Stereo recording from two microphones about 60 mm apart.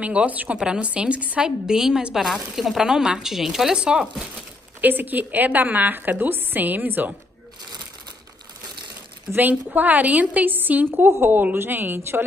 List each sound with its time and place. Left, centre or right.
0.0 s speech: right
4.8 s a woman's voice: right
9.3 s a woman's voice: right